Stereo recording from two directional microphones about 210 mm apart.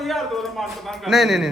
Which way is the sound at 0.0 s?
Centre (ahead or behind).